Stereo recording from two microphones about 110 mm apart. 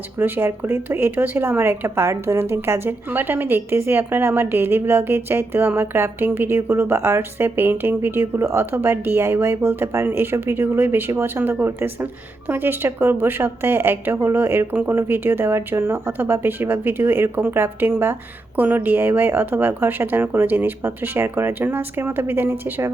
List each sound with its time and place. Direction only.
0.2 s a woman's voice: 20° right (ahead or behind)